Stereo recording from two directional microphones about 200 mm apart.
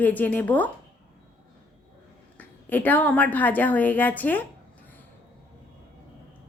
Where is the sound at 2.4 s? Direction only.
10° left (ahead or behind).